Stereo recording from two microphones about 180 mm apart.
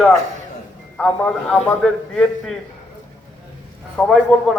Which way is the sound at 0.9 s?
5° left (ahead or behind).